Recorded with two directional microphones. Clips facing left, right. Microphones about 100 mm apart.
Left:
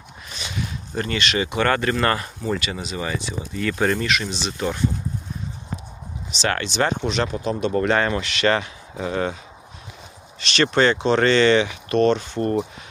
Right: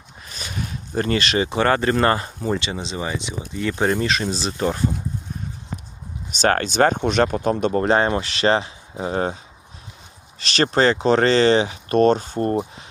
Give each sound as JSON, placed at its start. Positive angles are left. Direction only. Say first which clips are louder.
{"t": 0.3, "sound": "speech", "louder": "even", "side_deg": -40}
{"t": 6.3, "sound": "speech", "louder": "right 5 dB", "side_deg": -45}
{"t": 7.7, "sound": "speech", "louder": "even", "side_deg": -35}
{"t": 10.4, "sound": "speech", "louder": "right 1 dB", "side_deg": -35}